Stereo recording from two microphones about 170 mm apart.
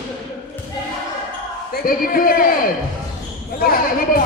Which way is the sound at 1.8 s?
60° left (ahead or behind).